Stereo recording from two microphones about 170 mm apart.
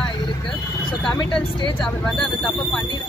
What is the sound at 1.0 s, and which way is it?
Speech, 30° left (ahead or behind).